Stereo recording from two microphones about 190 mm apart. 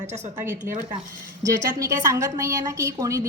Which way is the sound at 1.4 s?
15° right (ahead or behind).